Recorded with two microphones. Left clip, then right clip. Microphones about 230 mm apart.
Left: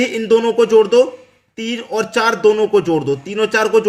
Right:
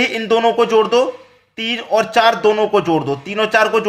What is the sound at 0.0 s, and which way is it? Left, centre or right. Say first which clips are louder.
Speech: even; centre.